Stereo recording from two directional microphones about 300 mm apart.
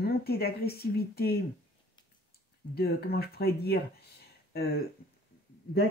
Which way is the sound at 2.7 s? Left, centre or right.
Left.